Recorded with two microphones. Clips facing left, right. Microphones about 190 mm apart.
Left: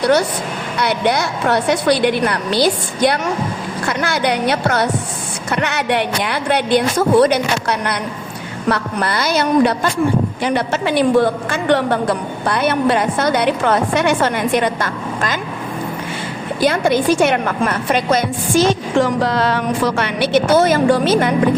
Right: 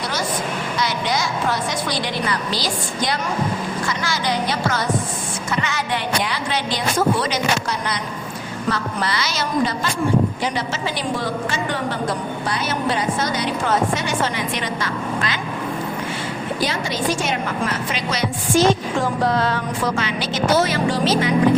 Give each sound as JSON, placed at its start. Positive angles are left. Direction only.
{"t": 0.0, "sound": "a woman's voice", "side_deg": 65}
{"t": 16.6, "sound": "a woman's voice", "side_deg": 55}
{"t": 18.9, "sound": "a woman's voice", "side_deg": 85}